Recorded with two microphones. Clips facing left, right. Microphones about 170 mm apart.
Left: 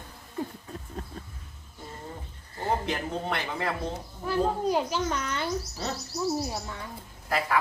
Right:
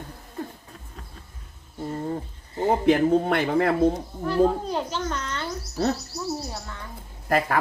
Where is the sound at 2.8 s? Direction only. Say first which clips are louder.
Right 12 dB; 55° right (ahead or behind).